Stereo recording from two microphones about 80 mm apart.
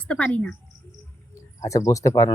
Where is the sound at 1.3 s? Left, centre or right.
Left.